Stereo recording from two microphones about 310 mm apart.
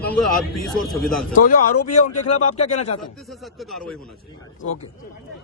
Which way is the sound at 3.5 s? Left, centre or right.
Centre.